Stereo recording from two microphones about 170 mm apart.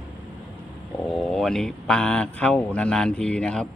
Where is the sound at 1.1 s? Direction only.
Centre (ahead or behind).